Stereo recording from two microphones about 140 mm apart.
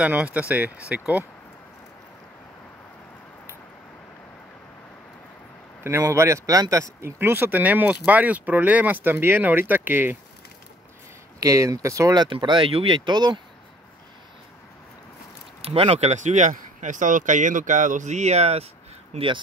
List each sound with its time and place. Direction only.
0.0 s speech: 10° right (ahead or behind)
5.9 s speech: 20° right (ahead or behind)
11.3 s speech: 25° right (ahead or behind)
15.6 s speech: 45° right (ahead or behind)
19.1 s speech: 35° right (ahead or behind)